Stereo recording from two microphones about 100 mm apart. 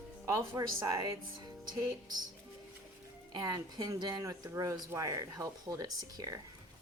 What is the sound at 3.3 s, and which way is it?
Speech, 40° right (ahead or behind).